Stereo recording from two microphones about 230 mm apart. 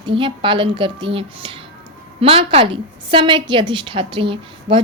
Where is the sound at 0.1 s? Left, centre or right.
Right.